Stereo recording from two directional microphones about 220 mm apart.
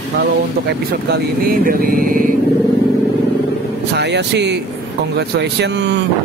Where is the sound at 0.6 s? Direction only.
45° right (ahead or behind).